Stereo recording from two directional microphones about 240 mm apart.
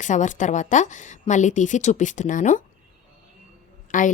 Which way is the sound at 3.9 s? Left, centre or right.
Left.